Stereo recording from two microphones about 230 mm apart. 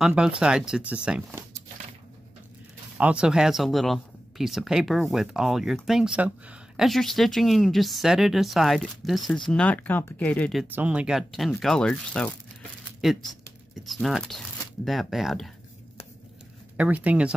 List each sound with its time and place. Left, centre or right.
0.0 s speech: centre
3.0 s speech: centre
16.7 s speech: centre